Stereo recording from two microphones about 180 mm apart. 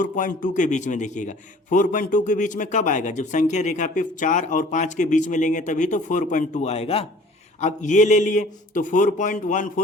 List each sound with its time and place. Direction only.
0.0 s a man's voice: 45° left (ahead or behind)